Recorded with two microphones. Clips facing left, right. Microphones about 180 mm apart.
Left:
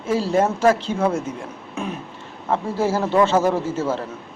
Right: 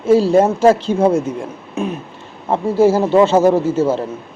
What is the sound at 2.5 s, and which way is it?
A man's voice, 25° right (ahead or behind).